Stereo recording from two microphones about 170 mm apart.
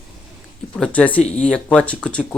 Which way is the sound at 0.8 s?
5° left (ahead or behind).